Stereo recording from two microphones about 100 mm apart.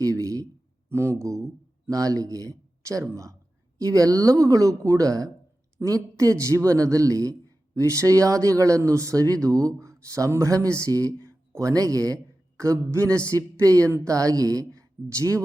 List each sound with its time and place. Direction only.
0.0 s a man's voice: 30° right (ahead or behind)